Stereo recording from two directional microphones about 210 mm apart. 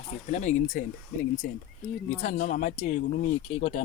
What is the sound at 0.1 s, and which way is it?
Speech, 30° left (ahead or behind).